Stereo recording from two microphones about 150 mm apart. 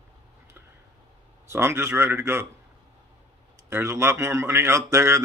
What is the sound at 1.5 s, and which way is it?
Speech, 15° right (ahead or behind).